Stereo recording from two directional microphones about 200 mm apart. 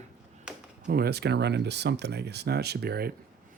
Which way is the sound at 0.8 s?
50° right (ahead or behind).